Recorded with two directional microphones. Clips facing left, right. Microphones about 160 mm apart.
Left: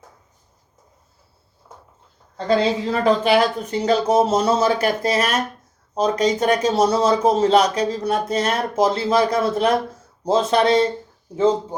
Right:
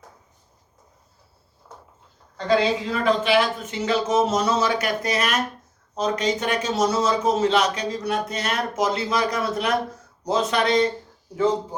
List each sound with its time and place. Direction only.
2.9 s a man's voice: 40° left (ahead or behind); by 11.8 s 25° left (ahead or behind)